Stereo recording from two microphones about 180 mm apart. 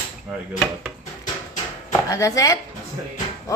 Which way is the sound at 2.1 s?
15° left (ahead or behind).